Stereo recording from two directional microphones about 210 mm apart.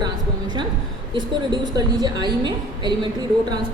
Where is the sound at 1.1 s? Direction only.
20° right (ahead or behind).